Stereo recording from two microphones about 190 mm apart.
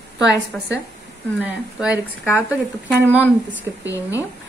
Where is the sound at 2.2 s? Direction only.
10° left (ahead or behind).